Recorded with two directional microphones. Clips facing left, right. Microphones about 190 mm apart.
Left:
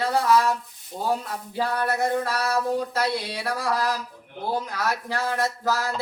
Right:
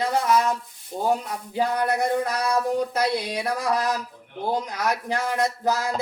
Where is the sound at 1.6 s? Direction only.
15° right (ahead or behind).